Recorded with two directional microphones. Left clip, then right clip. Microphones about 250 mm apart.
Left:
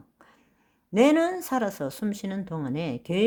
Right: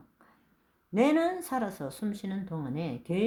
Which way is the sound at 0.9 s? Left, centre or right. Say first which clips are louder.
Left 5 dB; left.